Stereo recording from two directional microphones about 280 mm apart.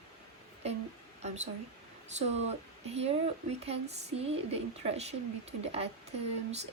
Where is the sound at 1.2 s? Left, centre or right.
Right.